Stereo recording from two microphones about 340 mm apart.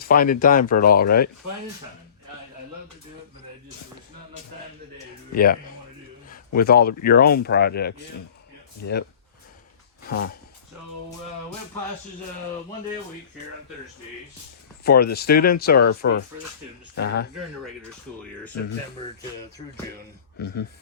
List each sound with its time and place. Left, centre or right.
0.0 s speech: left
5.3 s speech: left
10.1 s speech: left
14.8 s speech: left